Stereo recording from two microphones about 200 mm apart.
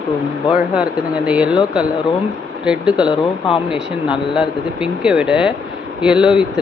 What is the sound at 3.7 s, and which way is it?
Speech, 5° right (ahead or behind).